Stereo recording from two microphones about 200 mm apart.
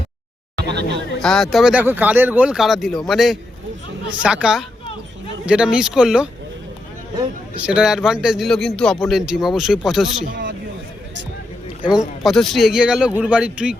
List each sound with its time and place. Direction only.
0.7 s speech: 55° right (ahead or behind)
1.2 s speech: centre (ahead or behind)
7.6 s speech: 5° right (ahead or behind)
10.1 s speech: 65° right (ahead or behind)
11.8 s speech: 5° right (ahead or behind)